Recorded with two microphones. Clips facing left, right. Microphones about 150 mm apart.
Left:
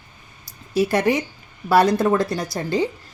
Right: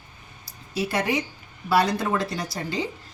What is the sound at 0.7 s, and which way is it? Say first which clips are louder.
A woman's voice: left 6 dB; 50° left (ahead or behind).